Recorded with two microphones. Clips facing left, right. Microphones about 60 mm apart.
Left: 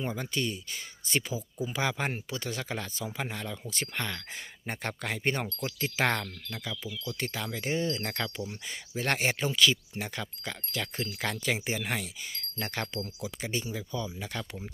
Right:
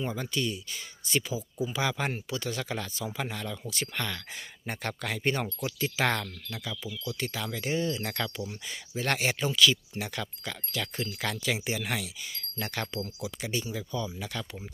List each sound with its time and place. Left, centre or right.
0.0 s speech: left
0.3 s speech: left
14.3 s speech: left